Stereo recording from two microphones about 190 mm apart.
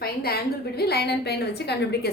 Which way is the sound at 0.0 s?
55° left (ahead or behind).